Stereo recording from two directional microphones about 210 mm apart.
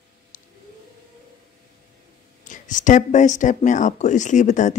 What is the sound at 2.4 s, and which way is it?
Speech, 35° left (ahead or behind).